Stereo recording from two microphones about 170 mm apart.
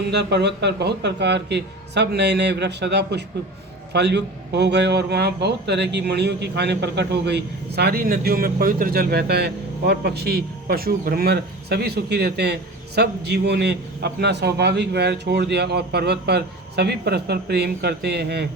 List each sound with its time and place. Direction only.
0.1 s a man's voice: 80° right